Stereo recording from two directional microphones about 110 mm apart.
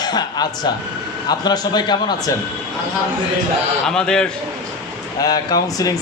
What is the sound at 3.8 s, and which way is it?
Speech, 5° left (ahead or behind).